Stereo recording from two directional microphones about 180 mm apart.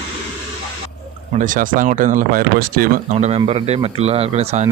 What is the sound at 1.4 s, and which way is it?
A man's voice, 45° right (ahead or behind).